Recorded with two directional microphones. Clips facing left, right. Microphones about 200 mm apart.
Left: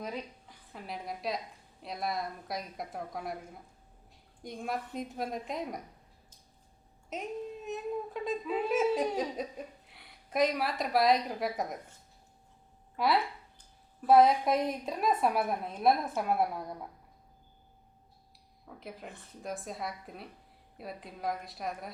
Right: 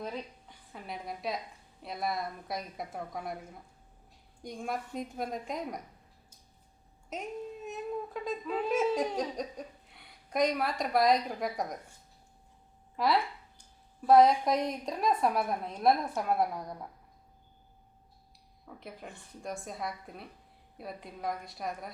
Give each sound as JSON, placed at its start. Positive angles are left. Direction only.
{"t": 0.0, "sound": "a woman's voice", "side_deg": 0}
{"t": 4.4, "sound": "speech", "side_deg": 0}
{"t": 7.1, "sound": "speech", "side_deg": 0}
{"t": 13.0, "sound": "speech", "side_deg": 0}
{"t": 18.8, "sound": "speech", "side_deg": 0}